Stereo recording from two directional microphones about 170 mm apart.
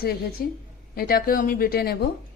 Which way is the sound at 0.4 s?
65° left (ahead or behind).